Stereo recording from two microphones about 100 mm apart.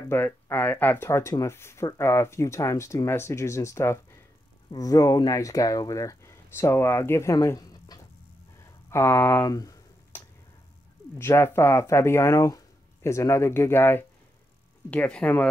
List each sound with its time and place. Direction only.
0.1 s speech: 20° left (ahead or behind); by 8.0 s 40° left (ahead or behind)
8.9 s speech: 30° left (ahead or behind)
11.1 s speech: 25° left (ahead or behind)